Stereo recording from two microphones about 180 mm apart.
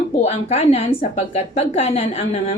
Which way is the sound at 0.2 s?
35° left (ahead or behind).